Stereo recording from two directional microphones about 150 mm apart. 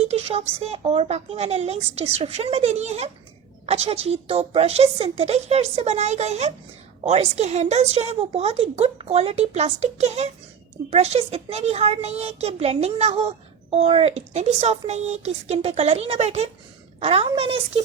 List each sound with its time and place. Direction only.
0.0 s a child's voice: 45° right (ahead or behind)